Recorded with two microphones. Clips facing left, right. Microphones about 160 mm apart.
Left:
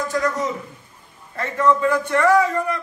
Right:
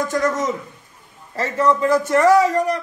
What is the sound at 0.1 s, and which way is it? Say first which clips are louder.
A man's voice: right 2 dB; 45° right (ahead or behind).